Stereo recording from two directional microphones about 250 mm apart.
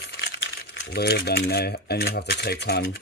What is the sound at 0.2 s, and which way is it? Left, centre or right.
Speech, left.